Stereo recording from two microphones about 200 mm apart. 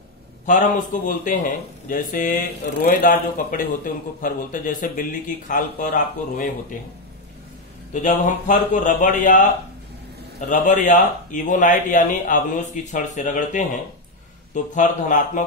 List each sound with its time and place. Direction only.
0.5 s a man's voice: 40° left (ahead or behind)
7.9 s speech: 40° left (ahead or behind)
10.7 s speech: 40° left (ahead or behind)